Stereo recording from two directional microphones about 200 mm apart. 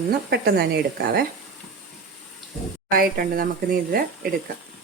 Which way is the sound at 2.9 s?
45° right (ahead or behind).